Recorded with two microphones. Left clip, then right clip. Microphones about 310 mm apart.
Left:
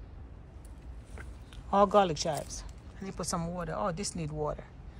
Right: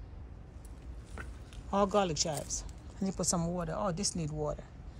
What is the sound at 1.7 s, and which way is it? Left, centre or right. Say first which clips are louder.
A woman's voice: left 5 dB; centre.